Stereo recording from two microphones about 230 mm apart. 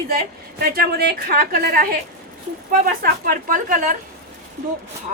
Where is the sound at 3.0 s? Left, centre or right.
Right.